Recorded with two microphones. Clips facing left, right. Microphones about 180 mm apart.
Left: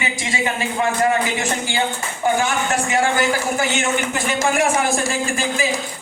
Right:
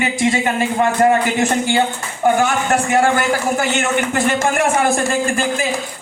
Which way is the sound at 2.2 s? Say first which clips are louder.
Right 4 dB; 60° right (ahead or behind).